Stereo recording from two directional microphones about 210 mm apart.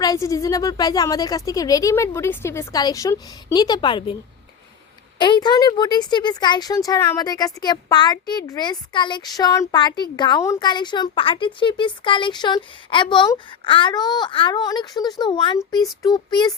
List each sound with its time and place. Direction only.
0.0 s speech: 15° left (ahead or behind)
5.2 s speech: 20° left (ahead or behind)